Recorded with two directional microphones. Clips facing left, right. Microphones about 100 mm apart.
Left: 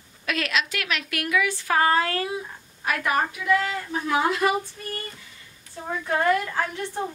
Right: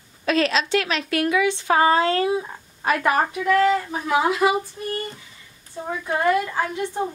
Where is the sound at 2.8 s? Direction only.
40° right (ahead or behind).